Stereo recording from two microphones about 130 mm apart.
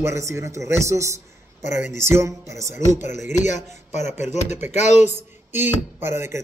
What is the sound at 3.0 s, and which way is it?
Speech, 65° left (ahead or behind).